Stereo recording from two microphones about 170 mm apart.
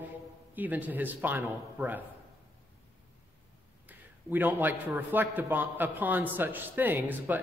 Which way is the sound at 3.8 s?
10° right (ahead or behind).